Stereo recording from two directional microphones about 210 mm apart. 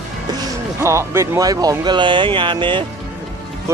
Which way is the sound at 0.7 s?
10° right (ahead or behind).